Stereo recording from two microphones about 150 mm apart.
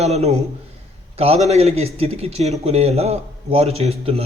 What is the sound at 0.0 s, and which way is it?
A man's voice, 45° right (ahead or behind).